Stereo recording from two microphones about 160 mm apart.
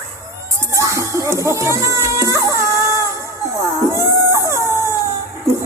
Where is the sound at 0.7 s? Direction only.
20° right (ahead or behind).